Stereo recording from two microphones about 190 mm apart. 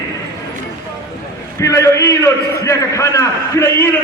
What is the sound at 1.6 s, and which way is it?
A man's voice, 15° left (ahead or behind).